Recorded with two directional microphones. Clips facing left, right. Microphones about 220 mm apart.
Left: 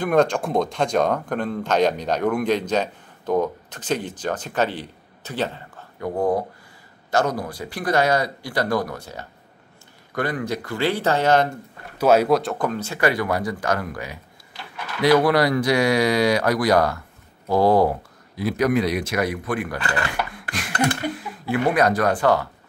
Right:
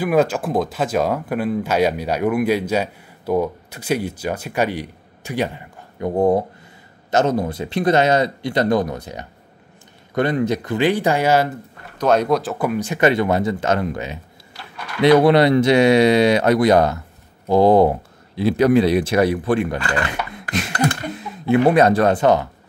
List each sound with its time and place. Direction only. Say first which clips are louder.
0.0 s speech: right 1 dB; 5° right (ahead or behind)
12.0 s speech: even; 5° left (ahead or behind); by 22.5 s 20° right (ahead or behind)